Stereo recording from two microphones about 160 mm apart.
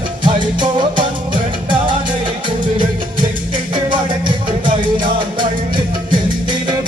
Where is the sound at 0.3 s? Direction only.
30° right (ahead or behind).